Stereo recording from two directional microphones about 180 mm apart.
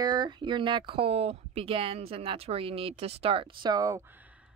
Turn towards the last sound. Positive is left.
turn(degrees=-20)  # may be behind; listen again after turning